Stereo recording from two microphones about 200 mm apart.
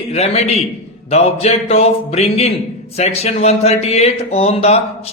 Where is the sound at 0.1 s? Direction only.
30° left (ahead or behind).